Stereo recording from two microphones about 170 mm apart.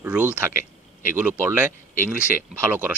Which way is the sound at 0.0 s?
10° right (ahead or behind).